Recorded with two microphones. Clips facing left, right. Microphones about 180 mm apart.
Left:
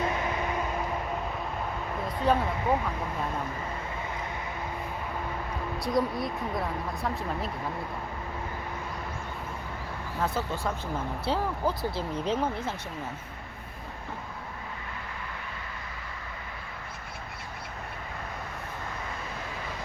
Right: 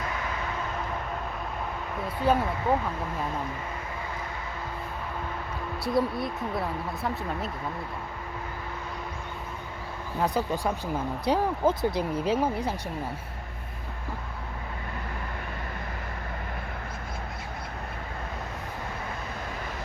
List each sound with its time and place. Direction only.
2.2 s speech: 5° right (ahead or behind)
5.8 s speech: 5° right (ahead or behind)
10.2 s speech: 15° right (ahead or behind)